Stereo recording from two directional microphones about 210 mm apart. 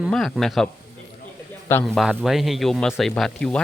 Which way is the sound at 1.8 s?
Centre (ahead or behind).